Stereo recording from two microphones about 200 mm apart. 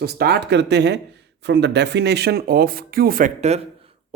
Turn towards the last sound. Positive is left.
turn(degrees=-30)  # may be behind; listen again after turning